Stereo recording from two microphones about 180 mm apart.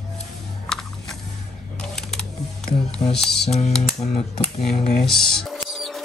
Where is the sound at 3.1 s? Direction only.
Centre (ahead or behind).